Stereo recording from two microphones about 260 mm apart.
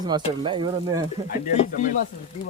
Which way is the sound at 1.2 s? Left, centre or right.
Left.